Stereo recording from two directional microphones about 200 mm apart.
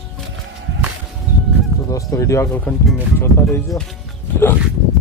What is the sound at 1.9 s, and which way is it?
Speech, 15° left (ahead or behind).